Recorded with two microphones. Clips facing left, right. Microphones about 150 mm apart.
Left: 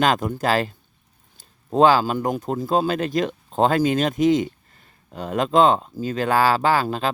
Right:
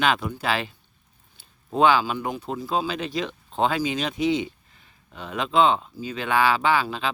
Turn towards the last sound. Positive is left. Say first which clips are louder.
# left 3 dB
turn(degrees=45)  # may be behind; listen again after turning